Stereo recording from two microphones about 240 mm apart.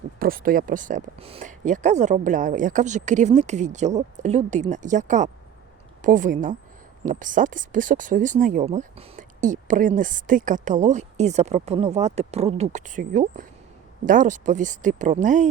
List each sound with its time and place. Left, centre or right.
0.2 s speech: right